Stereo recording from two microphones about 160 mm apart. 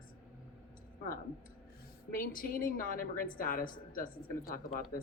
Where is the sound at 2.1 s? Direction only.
60° left (ahead or behind).